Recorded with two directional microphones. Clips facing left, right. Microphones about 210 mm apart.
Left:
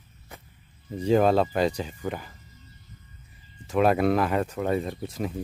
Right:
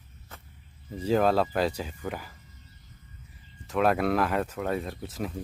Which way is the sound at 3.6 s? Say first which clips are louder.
Left 3 dB; centre (ahead or behind).